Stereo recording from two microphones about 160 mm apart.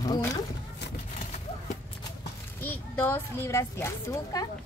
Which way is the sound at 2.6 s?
15° left (ahead or behind).